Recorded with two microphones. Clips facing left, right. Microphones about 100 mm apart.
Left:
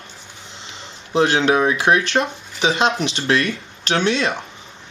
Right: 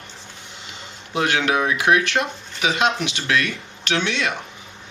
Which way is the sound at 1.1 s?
30° left (ahead or behind).